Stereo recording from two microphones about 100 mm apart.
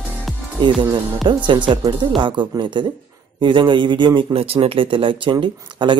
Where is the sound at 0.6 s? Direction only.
50° right (ahead or behind).